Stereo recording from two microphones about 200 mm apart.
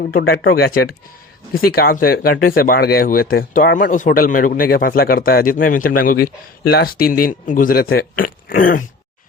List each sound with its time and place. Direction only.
0.0 s speech: 50° left (ahead or behind)